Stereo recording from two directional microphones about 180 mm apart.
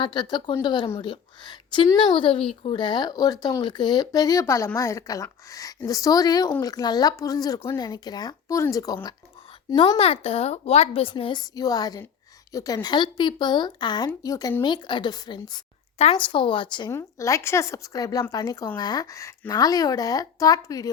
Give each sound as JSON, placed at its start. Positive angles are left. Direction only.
{"t": 0.0, "sound": "a woman's voice", "side_deg": 25}